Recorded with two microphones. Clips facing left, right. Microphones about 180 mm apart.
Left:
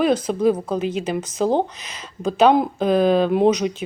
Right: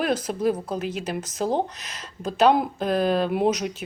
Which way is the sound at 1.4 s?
30° left (ahead or behind).